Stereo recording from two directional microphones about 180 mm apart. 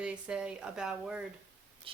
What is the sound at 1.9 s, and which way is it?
Speech, 30° right (ahead or behind).